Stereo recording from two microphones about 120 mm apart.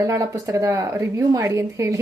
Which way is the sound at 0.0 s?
25° right (ahead or behind).